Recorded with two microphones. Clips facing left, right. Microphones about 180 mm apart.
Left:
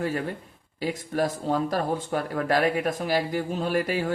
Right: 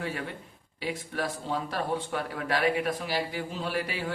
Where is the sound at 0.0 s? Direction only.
45° left (ahead or behind).